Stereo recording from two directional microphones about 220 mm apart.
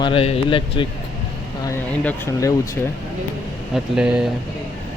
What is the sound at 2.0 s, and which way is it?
Speech, 15° left (ahead or behind).